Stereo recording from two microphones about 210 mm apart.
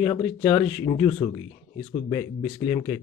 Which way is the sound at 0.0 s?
20° left (ahead or behind).